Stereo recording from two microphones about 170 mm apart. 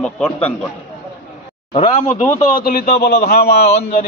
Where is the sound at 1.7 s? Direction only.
40° left (ahead or behind); by 3.8 s 70° left (ahead or behind).